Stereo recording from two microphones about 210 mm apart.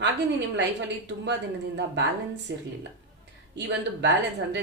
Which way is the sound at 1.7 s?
55° right (ahead or behind).